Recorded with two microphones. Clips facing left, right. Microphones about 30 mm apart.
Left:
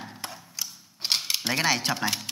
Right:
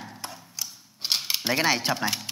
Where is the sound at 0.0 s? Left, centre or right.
Centre.